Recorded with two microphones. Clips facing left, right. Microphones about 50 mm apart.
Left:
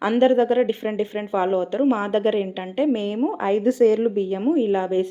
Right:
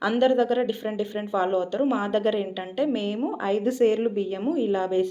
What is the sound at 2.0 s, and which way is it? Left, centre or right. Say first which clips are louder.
A woman's voice: left 3 dB; left.